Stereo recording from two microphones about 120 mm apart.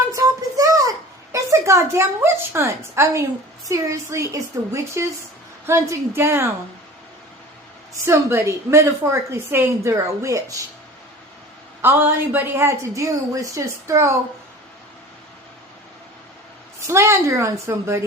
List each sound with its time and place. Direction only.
0.1 s a sound: 25° right (ahead or behind)
3.7 s a woman's voice: 25° right (ahead or behind)
8.0 s a woman's voice: 20° right (ahead or behind)
11.8 s a woman's voice: 20° right (ahead or behind)
16.8 s a woman's voice: 25° right (ahead or behind)